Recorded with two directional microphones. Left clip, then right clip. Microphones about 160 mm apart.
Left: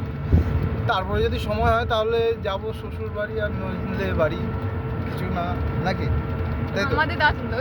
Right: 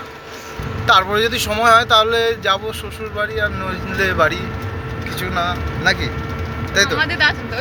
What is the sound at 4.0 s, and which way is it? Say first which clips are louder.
Speech: right 8 dB; centre (ahead or behind).